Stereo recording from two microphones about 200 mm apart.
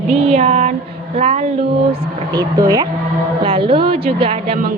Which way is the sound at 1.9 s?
20° right (ahead or behind).